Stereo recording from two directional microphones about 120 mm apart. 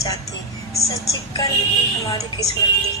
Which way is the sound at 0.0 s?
30° left (ahead or behind).